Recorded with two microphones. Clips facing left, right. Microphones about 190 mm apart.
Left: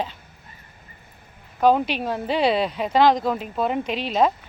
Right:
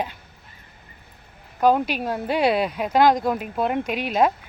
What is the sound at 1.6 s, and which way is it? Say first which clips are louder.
Speech: even; 5° right (ahead or behind).